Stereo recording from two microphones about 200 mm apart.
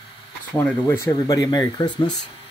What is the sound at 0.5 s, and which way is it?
Speech, 10° left (ahead or behind).